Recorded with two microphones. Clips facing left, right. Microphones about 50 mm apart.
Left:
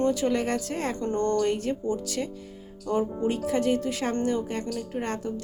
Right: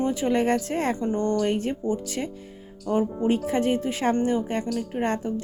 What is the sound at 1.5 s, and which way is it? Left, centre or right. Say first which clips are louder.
A woman's voice: right 2 dB; right.